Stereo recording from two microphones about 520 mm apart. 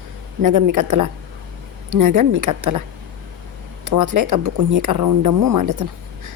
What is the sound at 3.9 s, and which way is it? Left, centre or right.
Speech, right.